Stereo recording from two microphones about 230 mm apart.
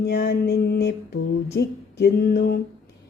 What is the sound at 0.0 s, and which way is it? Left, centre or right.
Mantra, left.